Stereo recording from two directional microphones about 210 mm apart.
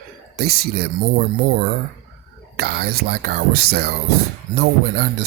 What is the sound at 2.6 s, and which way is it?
Speech, 50° right (ahead or behind).